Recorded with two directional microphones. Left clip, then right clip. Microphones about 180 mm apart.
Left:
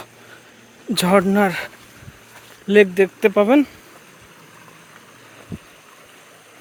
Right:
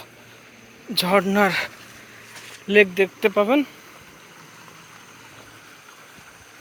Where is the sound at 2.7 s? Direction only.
50° left (ahead or behind).